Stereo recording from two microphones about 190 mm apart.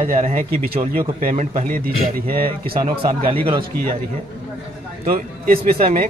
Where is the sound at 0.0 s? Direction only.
35° right (ahead or behind).